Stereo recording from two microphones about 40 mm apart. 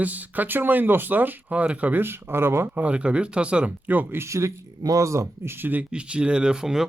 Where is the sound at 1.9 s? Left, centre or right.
Right.